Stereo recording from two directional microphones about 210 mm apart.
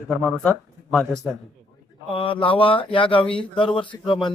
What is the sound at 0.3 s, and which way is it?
Speech, 5° left (ahead or behind).